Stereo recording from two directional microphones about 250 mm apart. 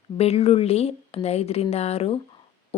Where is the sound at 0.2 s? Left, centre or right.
Left.